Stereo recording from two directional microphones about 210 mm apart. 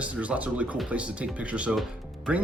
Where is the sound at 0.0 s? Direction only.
5° right (ahead or behind).